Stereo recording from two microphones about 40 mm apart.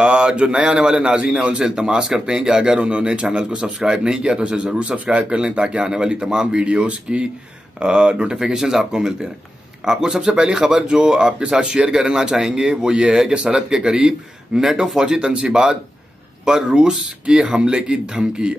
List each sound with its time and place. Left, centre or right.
0.0 s a man's voice: right
8.5 s a man's voice: centre; by 13.6 s right
13.6 s a man's voice: centre